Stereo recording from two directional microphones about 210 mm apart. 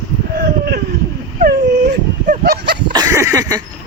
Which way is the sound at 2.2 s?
40° right (ahead or behind).